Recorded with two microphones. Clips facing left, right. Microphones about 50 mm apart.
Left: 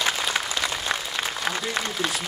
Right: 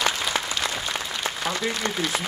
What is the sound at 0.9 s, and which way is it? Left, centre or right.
Applause, left.